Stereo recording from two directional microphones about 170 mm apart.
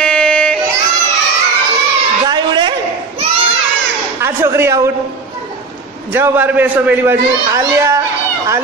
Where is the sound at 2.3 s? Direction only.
30° right (ahead or behind).